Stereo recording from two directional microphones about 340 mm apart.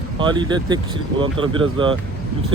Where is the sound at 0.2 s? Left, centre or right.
Centre.